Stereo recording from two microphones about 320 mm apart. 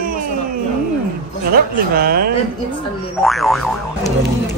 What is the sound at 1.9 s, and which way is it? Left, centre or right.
Speech, right.